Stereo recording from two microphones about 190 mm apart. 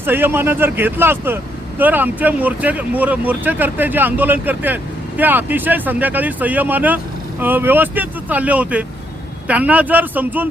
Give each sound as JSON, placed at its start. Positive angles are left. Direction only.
{"t": 0.0, "sound": "speech", "side_deg": -10}